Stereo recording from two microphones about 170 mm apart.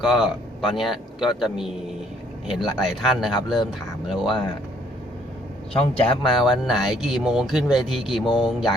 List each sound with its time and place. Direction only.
0.0 s speech: centre (ahead or behind)
4.3 s speech: 25° left (ahead or behind)
5.7 s a man's voice: 35° left (ahead or behind)
6.3 s speech: centre (ahead or behind)
8.2 s speech: 25° left (ahead or behind)